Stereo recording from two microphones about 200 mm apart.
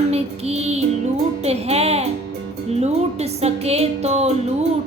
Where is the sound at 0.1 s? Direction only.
30° right (ahead or behind).